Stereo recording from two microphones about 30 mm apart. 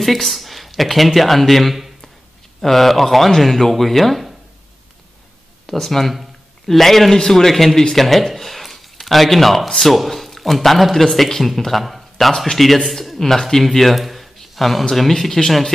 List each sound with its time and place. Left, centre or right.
0.0 s speech: centre
5.7 s speech: centre
13.2 s a man's voice: centre